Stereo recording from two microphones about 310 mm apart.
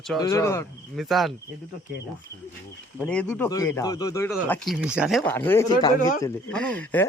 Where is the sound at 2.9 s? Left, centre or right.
Centre.